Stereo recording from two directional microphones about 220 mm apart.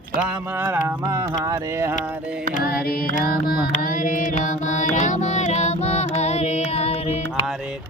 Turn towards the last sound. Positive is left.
turn(degrees=30)  # may be behind; listen again after turning